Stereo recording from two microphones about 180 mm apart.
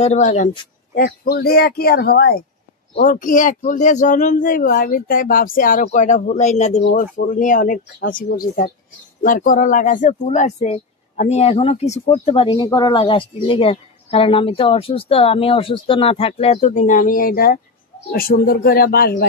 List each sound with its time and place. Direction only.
0.0 s speech: 40° left (ahead or behind)
0.9 s speech: 60° left (ahead or behind)
3.0 s speech: 45° left (ahead or behind)